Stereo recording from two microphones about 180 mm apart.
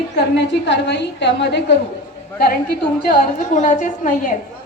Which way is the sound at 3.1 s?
45° left (ahead or behind).